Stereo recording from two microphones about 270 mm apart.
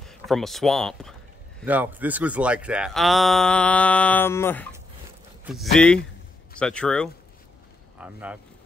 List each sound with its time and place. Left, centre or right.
0.0 s speech: centre